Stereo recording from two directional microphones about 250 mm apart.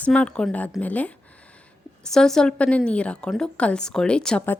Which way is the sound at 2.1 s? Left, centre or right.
Centre.